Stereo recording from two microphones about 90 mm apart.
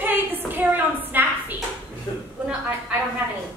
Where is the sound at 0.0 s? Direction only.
20° right (ahead or behind).